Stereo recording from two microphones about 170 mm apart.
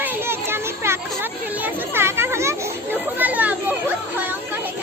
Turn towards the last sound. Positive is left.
turn(degrees=-10)  # may be behind; listen again after turning